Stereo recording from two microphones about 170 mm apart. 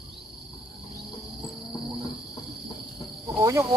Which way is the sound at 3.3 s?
20° right (ahead or behind).